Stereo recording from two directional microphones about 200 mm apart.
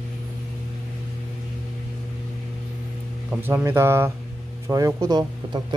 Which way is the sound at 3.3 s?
10° right (ahead or behind).